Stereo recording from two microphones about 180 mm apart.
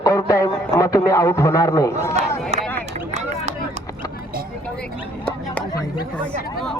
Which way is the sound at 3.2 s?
40° right (ahead or behind).